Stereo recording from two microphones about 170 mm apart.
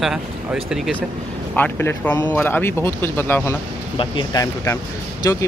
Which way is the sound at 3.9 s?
25° left (ahead or behind).